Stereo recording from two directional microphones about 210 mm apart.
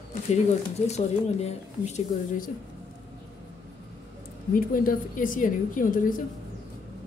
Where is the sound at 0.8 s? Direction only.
30° left (ahead or behind).